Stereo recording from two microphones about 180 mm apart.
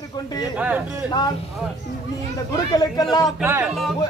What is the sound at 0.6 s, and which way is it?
Speech, 10° right (ahead or behind).